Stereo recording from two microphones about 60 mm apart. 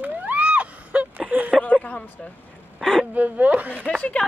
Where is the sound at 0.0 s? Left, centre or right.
Right.